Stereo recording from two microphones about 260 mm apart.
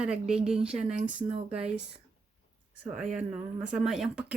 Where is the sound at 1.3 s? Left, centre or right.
Right.